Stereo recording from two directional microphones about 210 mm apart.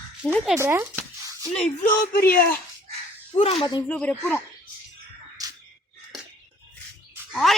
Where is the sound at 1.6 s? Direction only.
35° left (ahead or behind).